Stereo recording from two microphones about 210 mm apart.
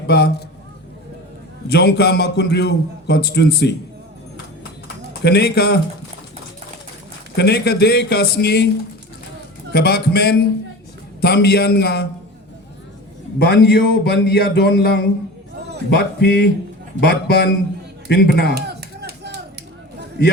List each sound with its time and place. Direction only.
0.1 s a man's voice: 50° left (ahead or behind)
1.6 s a man's voice: 50° left (ahead or behind)
5.2 s a man's voice: 50° left (ahead or behind)
7.3 s a man's voice: 50° left (ahead or behind)
9.7 s a man's voice: 50° left (ahead or behind)
13.4 s a man's voice: 50° left (ahead or behind)
18.5 s a sound: 50° right (ahead or behind)